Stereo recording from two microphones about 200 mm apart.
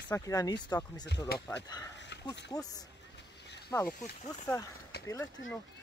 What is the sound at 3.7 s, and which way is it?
Speech, 10° left (ahead or behind).